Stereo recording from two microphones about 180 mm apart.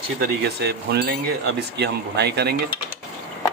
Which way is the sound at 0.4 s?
65° right (ahead or behind).